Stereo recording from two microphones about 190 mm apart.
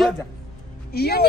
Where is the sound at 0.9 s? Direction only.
55° left (ahead or behind).